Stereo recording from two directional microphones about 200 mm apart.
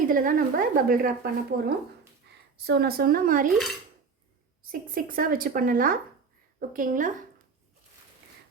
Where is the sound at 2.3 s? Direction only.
55° right (ahead or behind).